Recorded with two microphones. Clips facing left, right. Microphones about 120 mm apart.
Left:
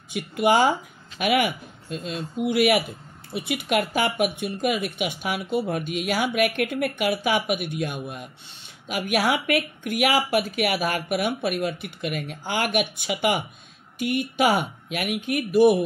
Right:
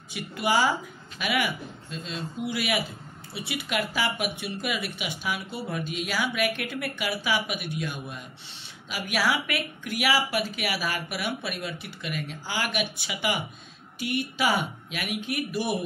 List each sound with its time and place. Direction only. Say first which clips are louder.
0.1 s speech: left 5 dB; 55° left (ahead or behind)